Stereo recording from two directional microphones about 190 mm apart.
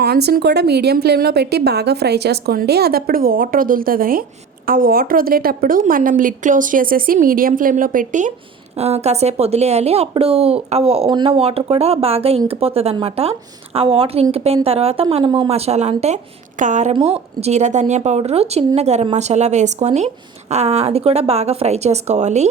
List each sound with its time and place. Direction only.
0.0 s a woman's voice: 60° right (ahead or behind); by 22.4 s 35° right (ahead or behind)